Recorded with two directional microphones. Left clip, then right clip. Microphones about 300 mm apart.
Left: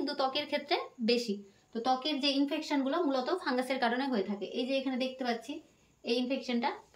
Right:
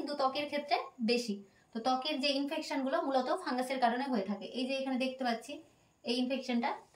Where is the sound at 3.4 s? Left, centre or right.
Centre.